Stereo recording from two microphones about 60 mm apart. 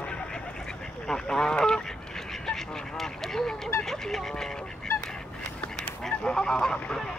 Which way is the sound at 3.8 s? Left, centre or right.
Centre.